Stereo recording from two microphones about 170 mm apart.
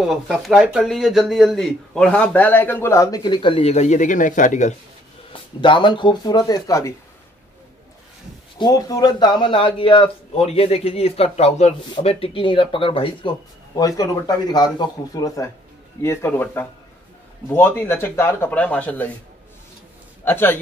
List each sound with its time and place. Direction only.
0.0 s speech: centre (ahead or behind); by 4.7 s 45° left (ahead or behind)
5.3 s speech: 30° left (ahead or behind)
8.5 s a man's voice: 25° left (ahead or behind)
13.7 s speech: 20° left (ahead or behind)
20.2 s speech: 10° left (ahead or behind)